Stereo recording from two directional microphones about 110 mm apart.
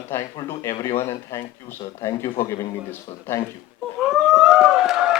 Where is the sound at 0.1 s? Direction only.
25° left (ahead or behind).